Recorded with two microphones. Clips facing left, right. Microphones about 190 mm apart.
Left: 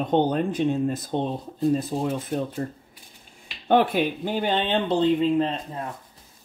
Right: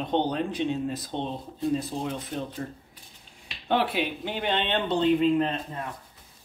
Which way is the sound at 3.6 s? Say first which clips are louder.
Left 6 dB; 50° left (ahead or behind).